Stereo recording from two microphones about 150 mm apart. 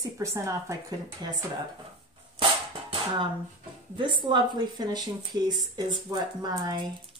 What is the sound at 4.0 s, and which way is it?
Speech, 30° right (ahead or behind).